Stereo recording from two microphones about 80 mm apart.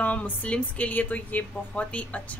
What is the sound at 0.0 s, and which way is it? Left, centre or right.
A woman's voice, centre.